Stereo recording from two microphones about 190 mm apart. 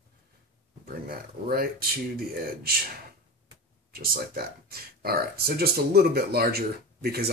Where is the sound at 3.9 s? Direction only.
50° right (ahead or behind).